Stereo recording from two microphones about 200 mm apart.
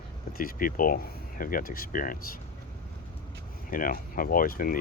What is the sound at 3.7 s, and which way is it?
Speech, 45° left (ahead or behind).